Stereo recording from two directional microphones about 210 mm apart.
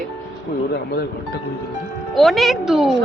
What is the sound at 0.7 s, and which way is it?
Speech, 50° left (ahead or behind).